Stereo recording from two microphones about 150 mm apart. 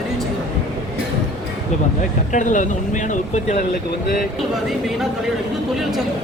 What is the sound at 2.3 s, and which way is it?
Speech, 55° left (ahead or behind).